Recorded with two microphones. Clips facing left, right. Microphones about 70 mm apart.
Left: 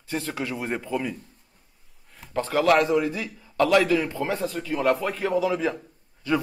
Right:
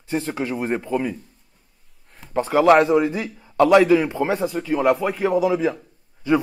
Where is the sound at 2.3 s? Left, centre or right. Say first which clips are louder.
Right 6 dB; centre.